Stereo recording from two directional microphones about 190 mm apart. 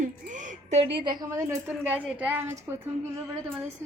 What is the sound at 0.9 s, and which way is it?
A woman's voice, 25° right (ahead or behind).